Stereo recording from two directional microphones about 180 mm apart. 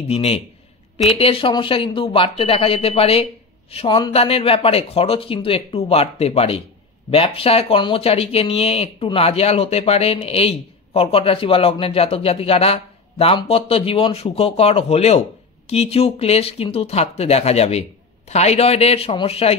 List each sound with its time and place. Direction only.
0.1 s speech: 35° left (ahead or behind)